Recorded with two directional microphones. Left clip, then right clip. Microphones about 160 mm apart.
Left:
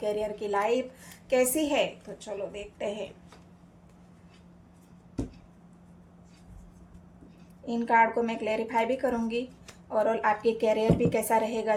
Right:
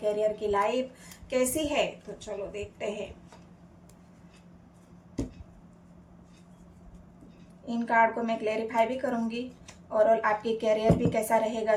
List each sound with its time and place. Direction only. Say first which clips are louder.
0.0 s a woman's voice: right 3 dB; 45° left (ahead or behind)
7.6 s a woman's voice: left 1 dB; 45° left (ahead or behind)